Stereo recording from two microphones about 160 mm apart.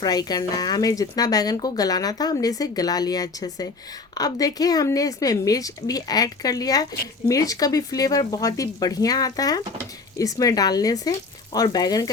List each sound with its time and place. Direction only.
0.0 s speech: 25° left (ahead or behind)